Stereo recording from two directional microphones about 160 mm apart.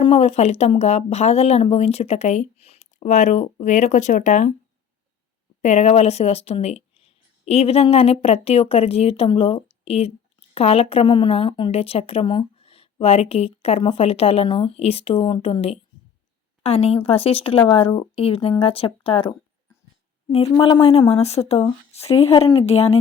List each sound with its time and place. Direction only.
0.0 s speech: 40° left (ahead or behind)
5.6 s a woman's voice: 45° left (ahead or behind)